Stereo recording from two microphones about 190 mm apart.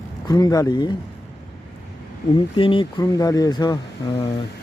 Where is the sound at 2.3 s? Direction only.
25° left (ahead or behind).